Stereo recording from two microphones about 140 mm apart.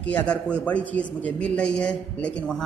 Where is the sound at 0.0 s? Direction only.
10° left (ahead or behind).